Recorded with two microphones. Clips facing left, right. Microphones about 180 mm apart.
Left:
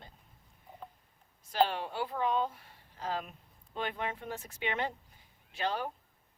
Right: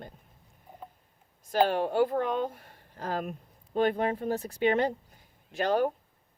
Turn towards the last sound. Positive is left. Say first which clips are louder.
# right 9 dB
turn(degrees=-45)  # may be behind; listen again after turning